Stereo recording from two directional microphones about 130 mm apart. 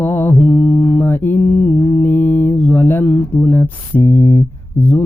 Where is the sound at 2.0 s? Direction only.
15° left (ahead or behind).